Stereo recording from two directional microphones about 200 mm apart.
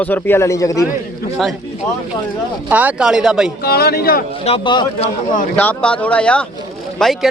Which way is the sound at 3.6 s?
50° left (ahead or behind).